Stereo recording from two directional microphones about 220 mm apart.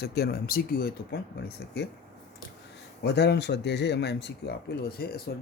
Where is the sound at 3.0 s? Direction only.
50° left (ahead or behind).